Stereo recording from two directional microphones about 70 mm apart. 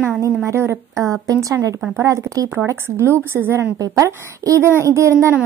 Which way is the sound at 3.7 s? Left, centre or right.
Right.